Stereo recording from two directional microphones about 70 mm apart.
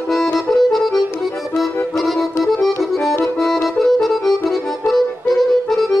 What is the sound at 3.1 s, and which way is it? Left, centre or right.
Accordion, left.